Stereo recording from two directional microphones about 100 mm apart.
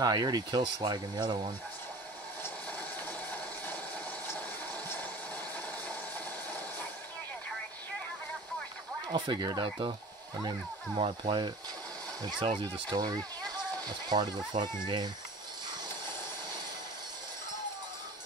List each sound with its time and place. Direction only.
0.0 s speech: 40° right (ahead or behind)
9.1 s speech: 45° right (ahead or behind)
11.0 s speech: 55° right (ahead or behind)